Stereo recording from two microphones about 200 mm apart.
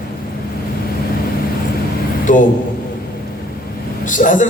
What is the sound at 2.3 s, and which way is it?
Speech, 40° left (ahead or behind).